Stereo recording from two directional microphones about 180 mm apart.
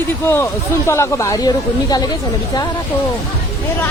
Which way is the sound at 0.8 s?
15° left (ahead or behind).